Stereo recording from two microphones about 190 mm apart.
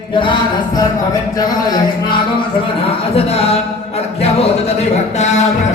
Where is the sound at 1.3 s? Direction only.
20° left (ahead or behind).